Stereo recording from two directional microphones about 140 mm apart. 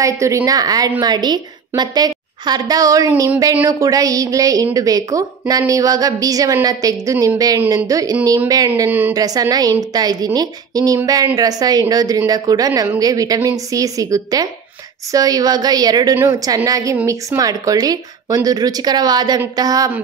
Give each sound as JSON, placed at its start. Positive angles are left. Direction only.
{"t": 0.0, "sound": "a woman's voice", "side_deg": -20}
{"t": 9.1, "sound": "a woman's voice", "side_deg": -25}